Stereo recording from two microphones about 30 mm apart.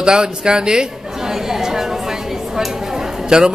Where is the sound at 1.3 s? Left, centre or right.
Centre.